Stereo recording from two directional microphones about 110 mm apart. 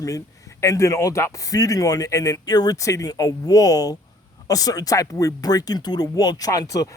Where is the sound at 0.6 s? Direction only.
30° left (ahead or behind).